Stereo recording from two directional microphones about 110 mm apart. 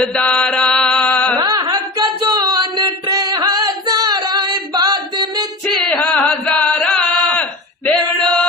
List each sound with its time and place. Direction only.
0.0 s mantra: 10° left (ahead or behind)
1.4 s singing: 40° right (ahead or behind)
5.6 s chant: 5° left (ahead or behind)